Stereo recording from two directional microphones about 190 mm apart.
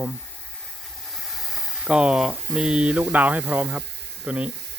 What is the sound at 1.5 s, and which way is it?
Speech, 5° right (ahead or behind).